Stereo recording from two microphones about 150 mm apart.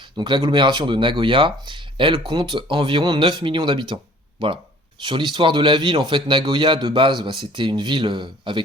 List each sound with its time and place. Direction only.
0.2 s speech: 30° right (ahead or behind)